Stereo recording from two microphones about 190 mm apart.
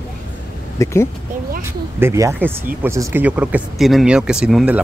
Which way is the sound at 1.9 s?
15° right (ahead or behind).